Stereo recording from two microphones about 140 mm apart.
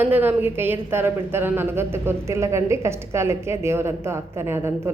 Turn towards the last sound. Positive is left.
turn(degrees=-15)  # may be behind; listen again after turning